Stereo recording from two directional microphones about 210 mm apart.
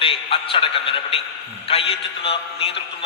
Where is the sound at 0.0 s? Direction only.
25° left (ahead or behind).